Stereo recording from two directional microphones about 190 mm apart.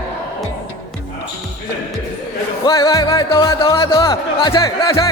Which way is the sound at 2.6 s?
20° left (ahead or behind).